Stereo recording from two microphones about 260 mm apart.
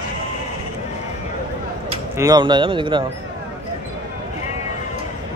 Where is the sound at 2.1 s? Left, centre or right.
Centre.